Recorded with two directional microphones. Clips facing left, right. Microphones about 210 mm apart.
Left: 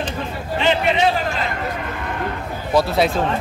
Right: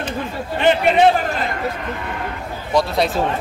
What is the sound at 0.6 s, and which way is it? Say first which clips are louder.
Speech: right 3 dB; 55° right (ahead or behind).